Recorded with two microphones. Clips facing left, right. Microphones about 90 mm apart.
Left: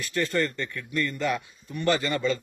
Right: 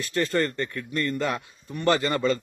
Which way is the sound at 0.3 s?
35° right (ahead or behind).